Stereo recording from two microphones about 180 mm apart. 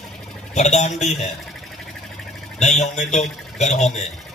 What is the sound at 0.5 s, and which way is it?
Speech, 40° left (ahead or behind).